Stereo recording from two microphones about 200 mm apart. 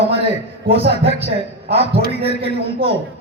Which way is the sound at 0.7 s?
30° right (ahead or behind).